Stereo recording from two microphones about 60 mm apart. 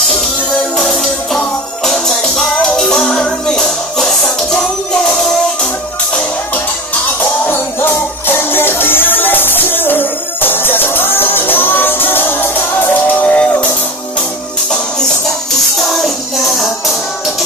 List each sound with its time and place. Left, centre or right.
0.7 s music: centre
7.2 s music: left
15.9 s music: centre